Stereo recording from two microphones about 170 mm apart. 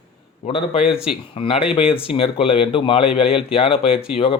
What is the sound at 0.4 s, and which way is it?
Speech, 35° left (ahead or behind).